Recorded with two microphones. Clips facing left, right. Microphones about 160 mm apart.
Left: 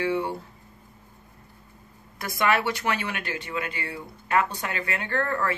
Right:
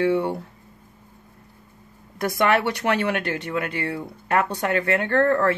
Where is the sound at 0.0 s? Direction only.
55° right (ahead or behind).